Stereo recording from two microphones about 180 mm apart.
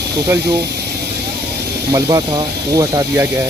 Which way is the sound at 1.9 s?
20° right (ahead or behind).